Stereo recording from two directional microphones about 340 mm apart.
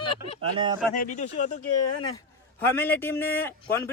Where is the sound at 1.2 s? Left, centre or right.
Left.